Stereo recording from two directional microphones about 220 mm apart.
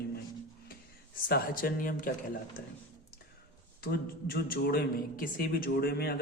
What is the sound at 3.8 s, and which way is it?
A man's voice, 40° left (ahead or behind).